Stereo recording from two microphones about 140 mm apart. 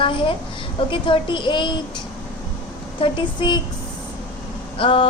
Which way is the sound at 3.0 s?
35° left (ahead or behind).